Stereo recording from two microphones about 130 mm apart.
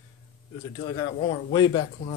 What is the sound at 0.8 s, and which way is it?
Speech, 35° left (ahead or behind).